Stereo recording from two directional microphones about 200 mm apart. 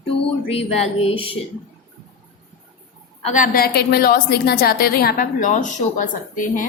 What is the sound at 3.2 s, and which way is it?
A woman's voice, 40° left (ahead or behind).